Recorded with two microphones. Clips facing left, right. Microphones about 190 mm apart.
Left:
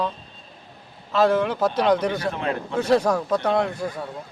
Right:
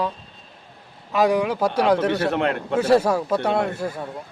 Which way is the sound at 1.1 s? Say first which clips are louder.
Even; 15° right (ahead or behind).